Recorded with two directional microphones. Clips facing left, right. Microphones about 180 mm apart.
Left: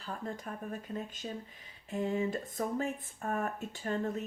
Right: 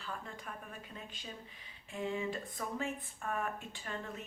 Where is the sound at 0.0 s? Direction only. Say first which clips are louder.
Left 5 dB; 40° left (ahead or behind).